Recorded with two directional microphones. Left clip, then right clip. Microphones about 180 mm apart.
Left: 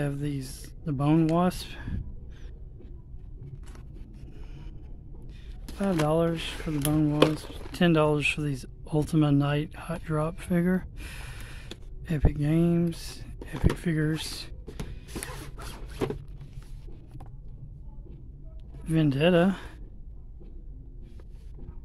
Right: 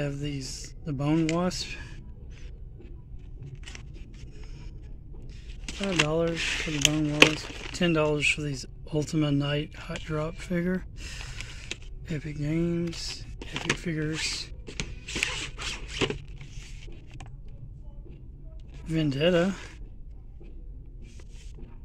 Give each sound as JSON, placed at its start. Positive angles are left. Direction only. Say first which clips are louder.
{"t": 0.0, "sound": "speech", "louder": "even", "side_deg": 30}
{"t": 5.7, "sound": "speech", "louder": "even", "side_deg": 20}
{"t": 6.3, "sound": "speech", "louder": "right 4 dB", "side_deg": 5}
{"t": 7.7, "sound": "speech", "louder": "left 2 dB", "side_deg": 30}
{"t": 14.8, "sound": "a sound", "louder": "right 11 dB", "side_deg": 20}
{"t": 18.9, "sound": "speech", "louder": "left 1 dB", "side_deg": 30}